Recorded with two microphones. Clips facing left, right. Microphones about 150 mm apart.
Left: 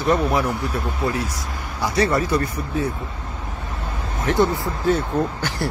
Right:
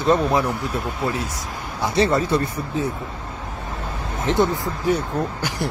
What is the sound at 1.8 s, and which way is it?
Speech, 25° right (ahead or behind).